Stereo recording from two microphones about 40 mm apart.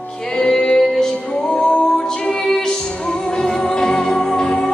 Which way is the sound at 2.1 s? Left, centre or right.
Centre.